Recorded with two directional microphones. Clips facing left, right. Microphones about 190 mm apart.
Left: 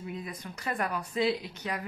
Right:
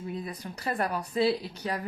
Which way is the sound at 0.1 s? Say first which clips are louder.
Right 3 dB; 35° right (ahead or behind).